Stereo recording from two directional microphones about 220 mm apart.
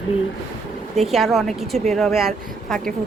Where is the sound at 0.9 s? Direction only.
Centre (ahead or behind).